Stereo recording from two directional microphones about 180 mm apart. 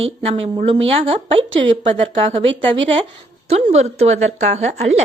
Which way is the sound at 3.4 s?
35° right (ahead or behind).